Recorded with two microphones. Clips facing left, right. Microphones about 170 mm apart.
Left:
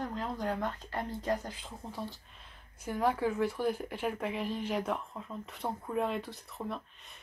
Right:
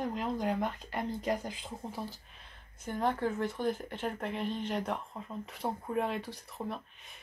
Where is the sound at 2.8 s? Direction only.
5° left (ahead or behind).